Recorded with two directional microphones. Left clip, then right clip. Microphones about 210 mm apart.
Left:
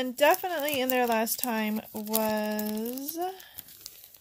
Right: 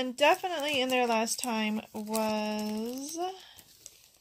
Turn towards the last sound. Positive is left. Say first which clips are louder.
# left 2 dB
turn(degrees=15)  # may be behind; listen again after turning